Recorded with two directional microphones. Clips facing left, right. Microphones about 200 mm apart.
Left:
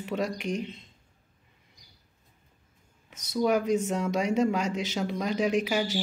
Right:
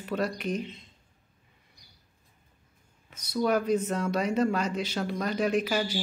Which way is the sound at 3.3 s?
15° left (ahead or behind).